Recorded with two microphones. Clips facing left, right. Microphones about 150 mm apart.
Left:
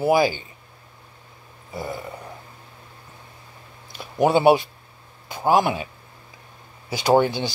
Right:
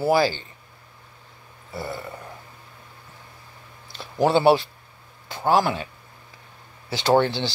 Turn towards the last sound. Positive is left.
turn(degrees=10)  # may be behind; listen again after turning